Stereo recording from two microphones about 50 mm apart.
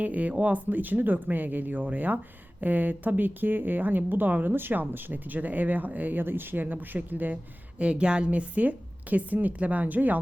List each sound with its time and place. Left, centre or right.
0.0 s speech: right
7.8 s speech: right